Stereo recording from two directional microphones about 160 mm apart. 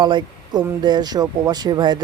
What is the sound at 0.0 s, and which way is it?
Speech, 25° right (ahead or behind).